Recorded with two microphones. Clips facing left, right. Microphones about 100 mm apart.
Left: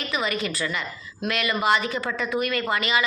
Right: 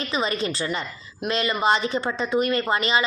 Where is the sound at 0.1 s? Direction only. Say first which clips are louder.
Right 1 dB; 30° right (ahead or behind).